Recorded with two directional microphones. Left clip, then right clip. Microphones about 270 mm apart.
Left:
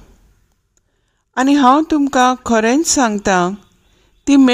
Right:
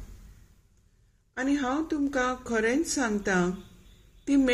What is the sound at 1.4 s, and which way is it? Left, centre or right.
Speech, left.